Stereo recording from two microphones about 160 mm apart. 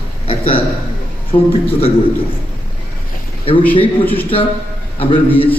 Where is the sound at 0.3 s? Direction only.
35° left (ahead or behind).